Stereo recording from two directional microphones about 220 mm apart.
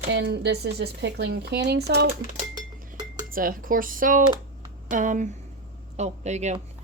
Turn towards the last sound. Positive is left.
turn(degrees=-30)  # may be behind; listen again after turning